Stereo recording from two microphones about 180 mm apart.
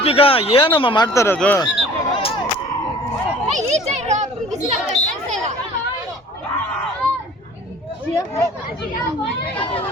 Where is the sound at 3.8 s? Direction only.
40° right (ahead or behind).